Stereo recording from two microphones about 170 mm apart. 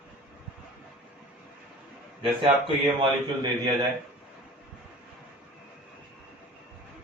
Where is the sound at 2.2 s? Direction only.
30° right (ahead or behind).